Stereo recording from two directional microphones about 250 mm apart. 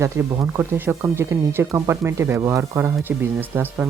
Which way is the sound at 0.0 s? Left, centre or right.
Centre.